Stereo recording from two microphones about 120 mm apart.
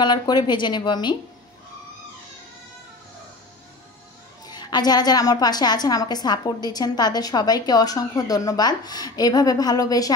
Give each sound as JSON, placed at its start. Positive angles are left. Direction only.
{"t": 0.0, "sound": "a woman's voice", "side_deg": 35}
{"t": 4.5, "sound": "a woman's voice", "side_deg": 35}